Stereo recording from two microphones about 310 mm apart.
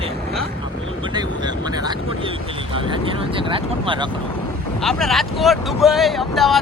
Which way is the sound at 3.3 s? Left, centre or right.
Centre.